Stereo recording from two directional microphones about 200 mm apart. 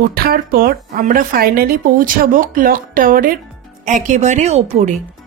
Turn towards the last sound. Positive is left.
turn(degrees=-30)  # may be behind; listen again after turning